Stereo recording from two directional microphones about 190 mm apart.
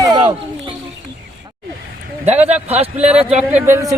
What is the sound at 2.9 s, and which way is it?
Speech, 5° right (ahead or behind).